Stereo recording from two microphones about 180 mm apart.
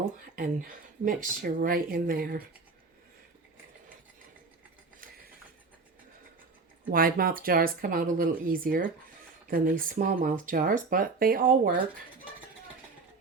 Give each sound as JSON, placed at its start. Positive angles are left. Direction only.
{"t": 0.3, "sound": "speech", "side_deg": -50}
{"t": 6.9, "sound": "speech", "side_deg": -55}